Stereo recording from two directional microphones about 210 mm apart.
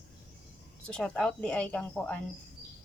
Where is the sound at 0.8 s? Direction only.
5° left (ahead or behind).